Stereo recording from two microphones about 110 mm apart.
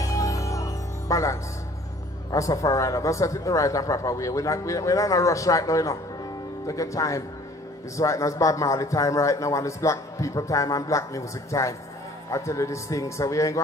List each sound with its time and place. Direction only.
0.0 s music: 30° left (ahead or behind)
2.3 s a man's voice: 30° left (ahead or behind)